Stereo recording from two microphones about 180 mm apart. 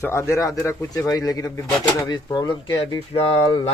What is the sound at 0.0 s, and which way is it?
Speech, 15° left (ahead or behind).